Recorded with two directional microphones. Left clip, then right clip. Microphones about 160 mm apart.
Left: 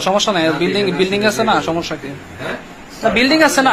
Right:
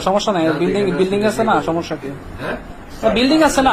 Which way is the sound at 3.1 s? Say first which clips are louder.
Left 2 dB; 15° right (ahead or behind).